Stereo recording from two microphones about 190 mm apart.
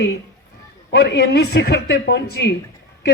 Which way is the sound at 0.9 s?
60° left (ahead or behind).